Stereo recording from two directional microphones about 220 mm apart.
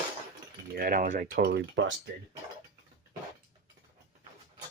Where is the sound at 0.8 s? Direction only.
40° right (ahead or behind).